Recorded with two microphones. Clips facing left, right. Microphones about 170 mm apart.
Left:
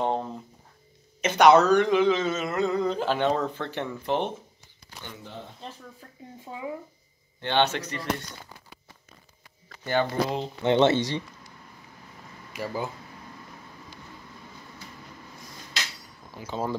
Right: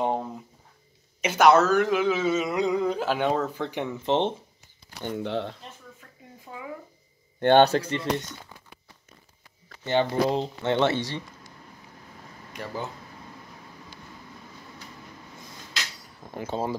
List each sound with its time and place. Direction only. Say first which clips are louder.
0.0 s a sound: even; 10° right (ahead or behind)
1.2 s speech: left 1 dB; 5° right (ahead or behind); by 4.3 s 25° right (ahead or behind)
5.0 s speech: right 12 dB; 65° right (ahead or behind)
5.6 s a sound: left 4 dB; 30° left (ahead or behind)
7.3 s speech: right 8 dB; 50° right (ahead or behind)
7.6 s speech: right 6 dB; 35° right (ahead or behind)
9.8 s speech: right 2 dB; 25° right (ahead or behind)
10.6 s speech: left 5 dB; 20° left (ahead or behind)
12.5 s speech: left 3 dB; 10° left (ahead or behind)
16.3 s a sound: right 6 dB; 50° right (ahead or behind)